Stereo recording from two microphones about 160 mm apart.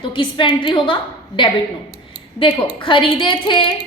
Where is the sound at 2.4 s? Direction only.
30° left (ahead or behind).